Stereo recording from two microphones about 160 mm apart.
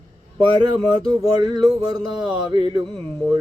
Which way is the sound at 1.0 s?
25° right (ahead or behind).